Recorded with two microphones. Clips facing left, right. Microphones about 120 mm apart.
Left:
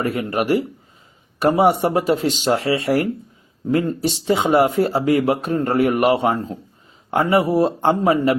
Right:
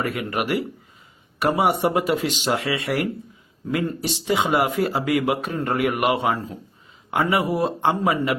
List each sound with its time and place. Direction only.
0.0 s speech: 35° left (ahead or behind)